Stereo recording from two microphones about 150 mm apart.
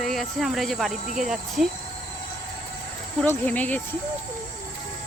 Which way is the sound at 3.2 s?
10° left (ahead or behind).